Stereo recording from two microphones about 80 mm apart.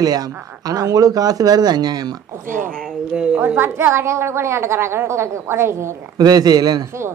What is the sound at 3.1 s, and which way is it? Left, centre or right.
Speech, centre.